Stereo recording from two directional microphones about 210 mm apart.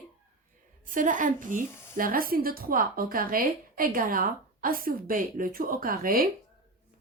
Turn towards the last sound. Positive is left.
turn(degrees=-40)  # may be behind; listen again after turning